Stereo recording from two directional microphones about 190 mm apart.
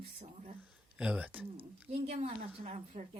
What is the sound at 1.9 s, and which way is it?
A woman's voice, 30° right (ahead or behind).